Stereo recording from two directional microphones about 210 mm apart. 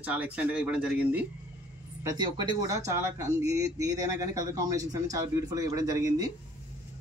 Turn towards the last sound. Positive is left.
turn(degrees=-15)  # may be behind; listen again after turning